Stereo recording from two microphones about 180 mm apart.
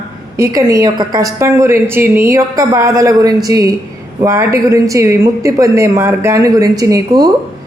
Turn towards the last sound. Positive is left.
turn(degrees=-20)  # may be behind; listen again after turning